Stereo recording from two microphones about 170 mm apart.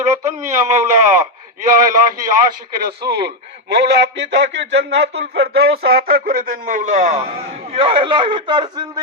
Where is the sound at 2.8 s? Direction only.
75° right (ahead or behind); by 7.2 s 50° right (ahead or behind).